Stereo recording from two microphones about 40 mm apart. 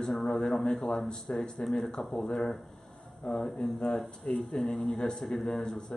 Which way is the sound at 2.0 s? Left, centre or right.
Centre.